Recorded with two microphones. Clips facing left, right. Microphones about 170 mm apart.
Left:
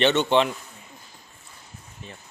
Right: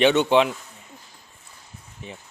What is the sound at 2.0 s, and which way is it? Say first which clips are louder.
Speech: right 4 dB; 15° right (ahead or behind).